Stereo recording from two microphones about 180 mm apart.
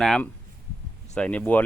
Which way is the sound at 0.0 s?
Centre (ahead or behind).